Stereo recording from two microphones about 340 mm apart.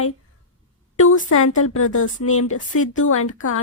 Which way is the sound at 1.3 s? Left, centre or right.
Left.